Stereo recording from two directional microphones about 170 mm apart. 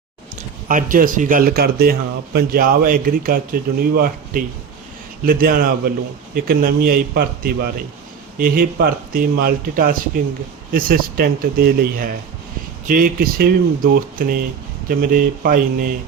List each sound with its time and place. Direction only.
0.7 s speech: 50° right (ahead or behind)